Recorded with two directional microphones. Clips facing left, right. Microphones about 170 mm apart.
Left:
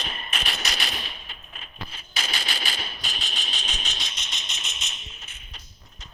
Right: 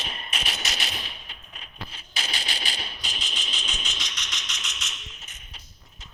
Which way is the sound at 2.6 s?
20° right (ahead or behind).